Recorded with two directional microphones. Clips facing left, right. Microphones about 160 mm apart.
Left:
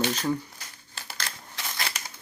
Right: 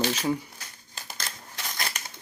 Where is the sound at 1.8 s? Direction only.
45° right (ahead or behind).